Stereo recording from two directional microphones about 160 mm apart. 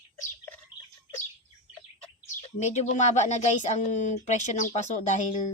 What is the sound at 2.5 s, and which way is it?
Speech, 45° left (ahead or behind).